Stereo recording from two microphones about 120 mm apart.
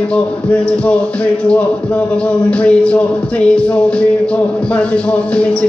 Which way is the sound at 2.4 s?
10° left (ahead or behind).